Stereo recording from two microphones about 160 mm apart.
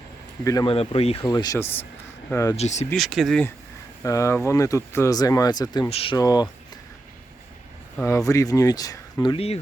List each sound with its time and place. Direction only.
0.4 s speech: 20° left (ahead or behind)
0.7 s speech: 40° left (ahead or behind)
1.2 s speech: 20° left (ahead or behind)
2.6 s speech: 45° left (ahead or behind)
2.9 s speech: centre (ahead or behind)
4.0 s speech: 20° left (ahead or behind)
5.9 s speech: 35° left (ahead or behind)
6.1 s speech: 25° left (ahead or behind)
7.9 s speech: 15° left (ahead or behind)
9.2 s speech: 35° left (ahead or behind)